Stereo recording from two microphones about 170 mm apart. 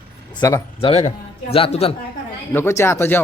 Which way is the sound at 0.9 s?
35° left (ahead or behind).